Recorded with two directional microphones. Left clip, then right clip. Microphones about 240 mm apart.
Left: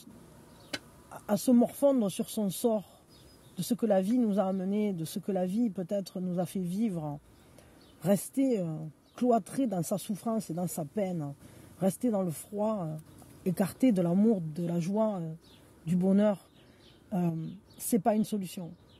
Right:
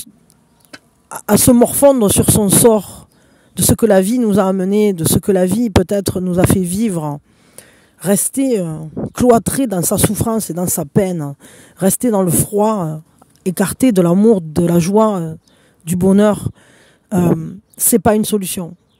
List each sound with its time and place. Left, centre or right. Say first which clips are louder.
1.0 s speech: right 18 dB; right